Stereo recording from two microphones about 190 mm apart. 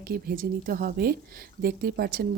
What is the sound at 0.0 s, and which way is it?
Speech, 50° right (ahead or behind).